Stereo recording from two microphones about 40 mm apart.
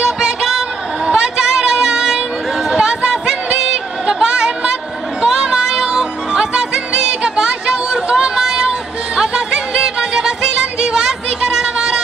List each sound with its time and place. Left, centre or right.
0.0 s music: centre
1.0 s a sound: centre
2.7 s chatter: centre
3.5 s music: centre